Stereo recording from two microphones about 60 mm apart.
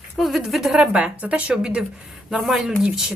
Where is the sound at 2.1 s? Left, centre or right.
Centre.